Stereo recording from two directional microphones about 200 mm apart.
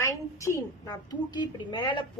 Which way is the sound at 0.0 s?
15° left (ahead or behind).